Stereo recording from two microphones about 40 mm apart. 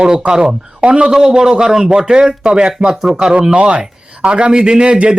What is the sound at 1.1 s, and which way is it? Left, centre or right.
A man's voice, centre.